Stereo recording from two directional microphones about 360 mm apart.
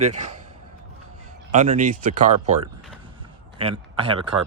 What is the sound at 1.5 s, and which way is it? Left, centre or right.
A man's voice, centre.